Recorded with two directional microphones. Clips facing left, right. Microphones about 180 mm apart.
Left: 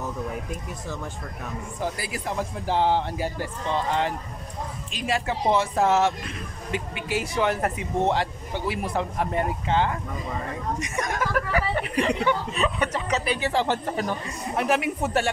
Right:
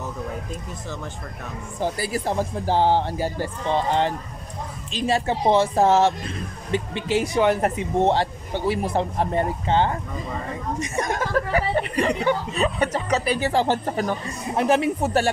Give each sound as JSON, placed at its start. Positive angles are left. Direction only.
{"t": 1.8, "sound": "speech", "side_deg": -30}
{"t": 14.6, "sound": "speech", "side_deg": -30}